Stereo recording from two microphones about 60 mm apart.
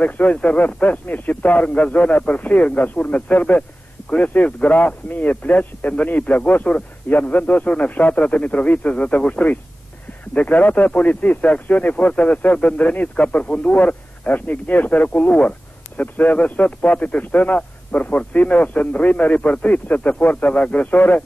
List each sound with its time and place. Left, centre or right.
0.0 s speech: left